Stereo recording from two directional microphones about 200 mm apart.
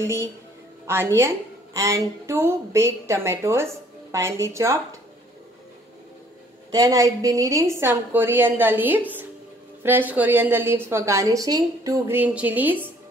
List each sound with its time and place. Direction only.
0.0 s a woman's voice: 10° right (ahead or behind)
6.7 s a woman's voice: 20° right (ahead or behind)